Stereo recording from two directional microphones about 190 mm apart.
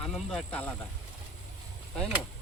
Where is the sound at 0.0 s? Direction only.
5° left (ahead or behind).